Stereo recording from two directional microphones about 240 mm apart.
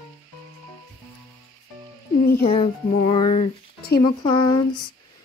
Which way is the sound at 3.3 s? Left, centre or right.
Left.